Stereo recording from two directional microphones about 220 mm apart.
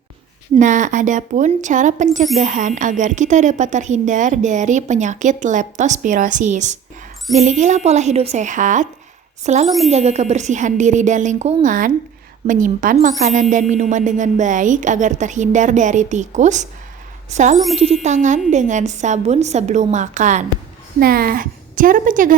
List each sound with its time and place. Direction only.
0.6 s a woman's voice: 35° right (ahead or behind)
9.6 s speech: centre (ahead or behind)
9.9 s a woman's voice: 30° right (ahead or behind)